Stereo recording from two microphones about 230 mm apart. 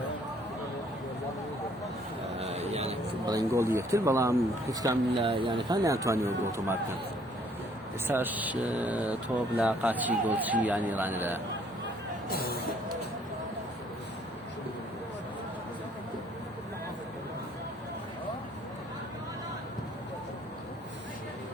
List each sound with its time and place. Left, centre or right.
2.4 s a sound: right
3.3 s speech: centre
8.0 s speech: centre
12.3 s speech: left